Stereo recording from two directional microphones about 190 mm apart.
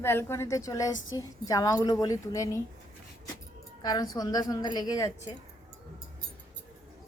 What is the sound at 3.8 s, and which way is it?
A woman's voice, 20° left (ahead or behind).